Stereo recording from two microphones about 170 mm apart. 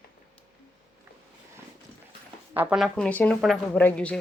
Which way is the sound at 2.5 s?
10° right (ahead or behind).